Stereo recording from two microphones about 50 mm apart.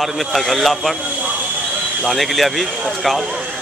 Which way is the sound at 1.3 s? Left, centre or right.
Right.